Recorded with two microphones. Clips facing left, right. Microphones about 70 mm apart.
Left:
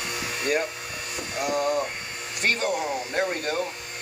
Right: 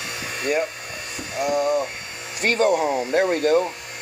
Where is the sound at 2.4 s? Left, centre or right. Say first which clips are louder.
Right 7 dB; right.